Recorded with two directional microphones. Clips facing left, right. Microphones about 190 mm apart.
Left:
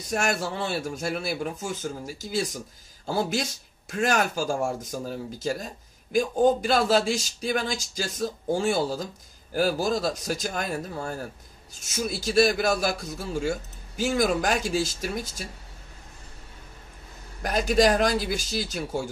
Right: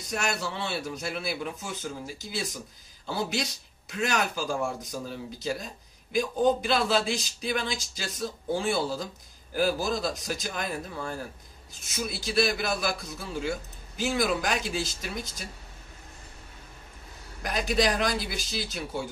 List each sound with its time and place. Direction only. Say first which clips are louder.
0.1 s a man's voice: left 4 dB; 50° left (ahead or behind)
17.4 s a man's voice: left 5 dB; 45° left (ahead or behind)